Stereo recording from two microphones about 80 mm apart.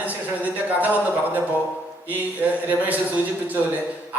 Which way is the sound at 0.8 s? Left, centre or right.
Right.